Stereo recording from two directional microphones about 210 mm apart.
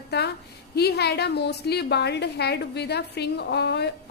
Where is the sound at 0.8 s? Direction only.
50° left (ahead or behind).